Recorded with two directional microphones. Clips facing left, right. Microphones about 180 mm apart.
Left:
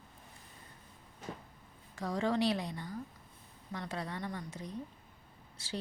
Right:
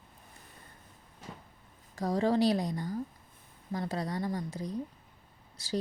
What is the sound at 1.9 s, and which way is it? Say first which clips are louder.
Speech: right 5 dB; 40° right (ahead or behind).